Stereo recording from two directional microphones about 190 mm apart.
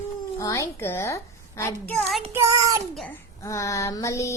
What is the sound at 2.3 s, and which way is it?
Child singing, 15° right (ahead or behind).